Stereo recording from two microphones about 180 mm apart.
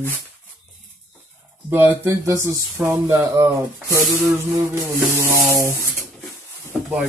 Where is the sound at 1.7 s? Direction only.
10° right (ahead or behind).